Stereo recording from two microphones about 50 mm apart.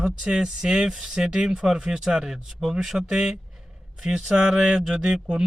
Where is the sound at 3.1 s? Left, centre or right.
Centre.